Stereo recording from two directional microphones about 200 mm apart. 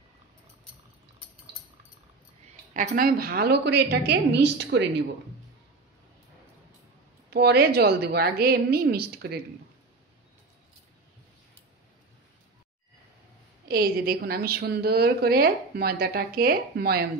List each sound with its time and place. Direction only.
2.7 s a woman's voice: 40° right (ahead or behind); by 4.8 s 60° right (ahead or behind)
7.2 s a woman's voice: 55° right (ahead or behind)
13.7 s a woman's voice: 50° right (ahead or behind)